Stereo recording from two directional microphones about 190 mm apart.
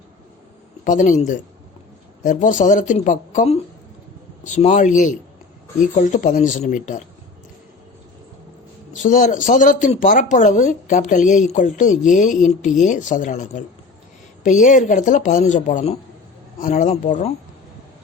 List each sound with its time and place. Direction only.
0.9 s speech: 45° left (ahead or behind)
2.2 s speech: 40° left (ahead or behind)
9.0 s speech: 40° left (ahead or behind)